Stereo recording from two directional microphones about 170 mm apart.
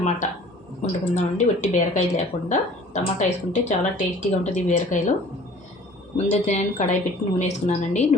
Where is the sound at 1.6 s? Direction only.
45° left (ahead or behind).